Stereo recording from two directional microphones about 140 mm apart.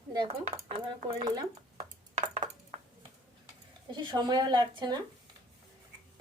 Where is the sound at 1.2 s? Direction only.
30° right (ahead or behind).